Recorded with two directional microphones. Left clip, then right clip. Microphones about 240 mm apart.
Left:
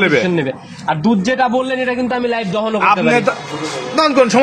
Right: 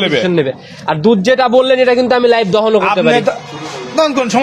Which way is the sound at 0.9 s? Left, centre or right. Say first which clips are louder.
Right 6 dB; right.